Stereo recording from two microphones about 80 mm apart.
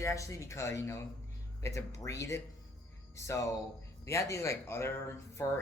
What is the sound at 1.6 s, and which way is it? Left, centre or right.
Speech, left.